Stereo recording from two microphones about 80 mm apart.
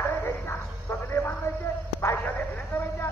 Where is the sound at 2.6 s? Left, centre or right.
Left.